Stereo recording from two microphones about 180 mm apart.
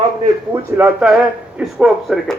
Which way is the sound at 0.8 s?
5° right (ahead or behind).